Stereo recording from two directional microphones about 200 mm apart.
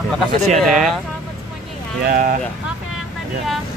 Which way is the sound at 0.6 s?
Centre (ahead or behind).